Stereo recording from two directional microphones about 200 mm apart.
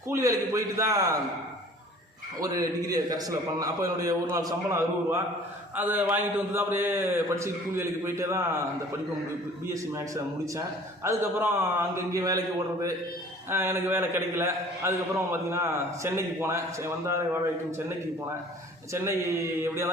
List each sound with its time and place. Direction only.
0.1 s a man's voice: 15° right (ahead or behind)
2.4 s a man's voice: 15° right (ahead or behind)
11.0 s a man's voice: 15° right (ahead or behind)
13.5 s a man's voice: 10° right (ahead or behind)
18.9 s a man's voice: 15° right (ahead or behind)